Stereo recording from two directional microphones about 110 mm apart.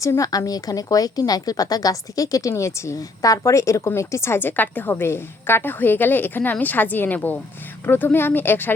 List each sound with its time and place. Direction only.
0.0 s speech: 30° left (ahead or behind)